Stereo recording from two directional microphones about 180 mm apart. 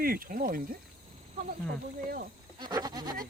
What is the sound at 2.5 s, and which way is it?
Goat, 20° right (ahead or behind).